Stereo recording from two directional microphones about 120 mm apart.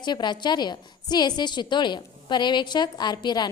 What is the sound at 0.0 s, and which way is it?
A woman's voice, 40° left (ahead or behind).